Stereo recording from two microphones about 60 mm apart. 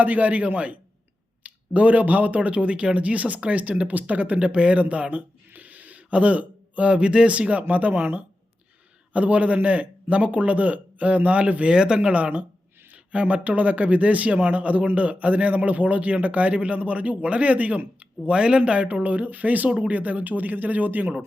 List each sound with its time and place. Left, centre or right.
0.0 s speech: right